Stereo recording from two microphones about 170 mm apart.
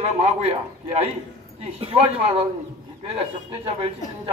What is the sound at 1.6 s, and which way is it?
Speech, 35° right (ahead or behind).